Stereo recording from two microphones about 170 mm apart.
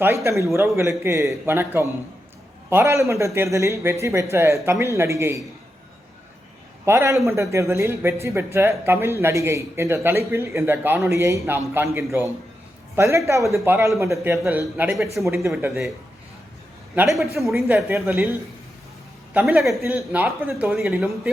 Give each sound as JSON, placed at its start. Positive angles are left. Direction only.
{"t": 0.0, "sound": "speech", "side_deg": -15}
{"t": 6.8, "sound": "speech", "side_deg": -15}
{"t": 16.9, "sound": "speech", "side_deg": -10}
{"t": 17.9, "sound": "speech", "side_deg": -15}
{"t": 19.3, "sound": "a man's voice", "side_deg": -10}